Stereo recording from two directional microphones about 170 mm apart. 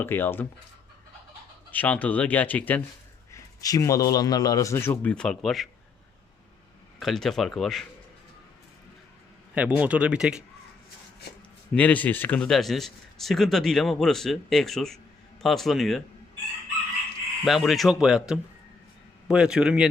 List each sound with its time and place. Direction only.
0.0 s a man's voice: 15° left (ahead or behind)
1.7 s a man's voice: 10° left (ahead or behind)
7.0 s speech: centre (ahead or behind)
9.6 s speech: 10° right (ahead or behind)
11.7 s speech: 10° left (ahead or behind)
17.4 s speech: centre (ahead or behind)